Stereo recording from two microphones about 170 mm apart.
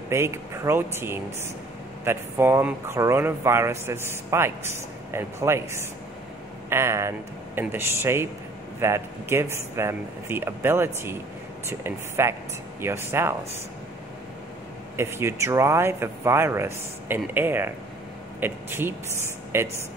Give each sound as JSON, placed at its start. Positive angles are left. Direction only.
{"t": 0.1, "sound": "speech", "side_deg": -15}
{"t": 15.0, "sound": "speech", "side_deg": -15}